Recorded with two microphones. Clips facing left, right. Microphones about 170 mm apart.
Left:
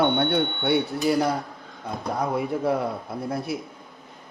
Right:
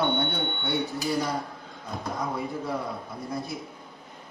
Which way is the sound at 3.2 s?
65° left (ahead or behind).